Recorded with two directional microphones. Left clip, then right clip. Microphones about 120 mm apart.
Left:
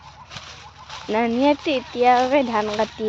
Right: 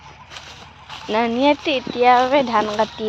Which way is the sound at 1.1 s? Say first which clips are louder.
Right 2 dB; 20° left (ahead or behind).